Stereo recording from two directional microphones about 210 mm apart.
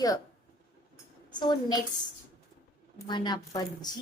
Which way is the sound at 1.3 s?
20° left (ahead or behind).